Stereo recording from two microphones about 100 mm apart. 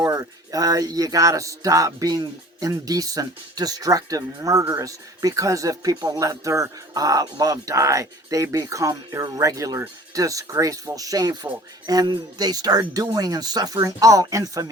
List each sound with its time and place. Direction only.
0.0 s speech: 35° right (ahead or behind)